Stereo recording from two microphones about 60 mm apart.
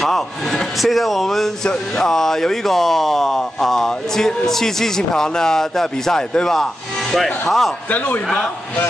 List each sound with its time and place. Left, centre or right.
0.0 s a man's voice: centre
7.9 s a man's voice: left